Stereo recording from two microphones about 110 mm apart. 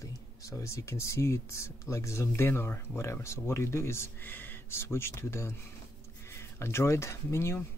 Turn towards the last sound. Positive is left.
turn(degrees=25)  # may be behind; listen again after turning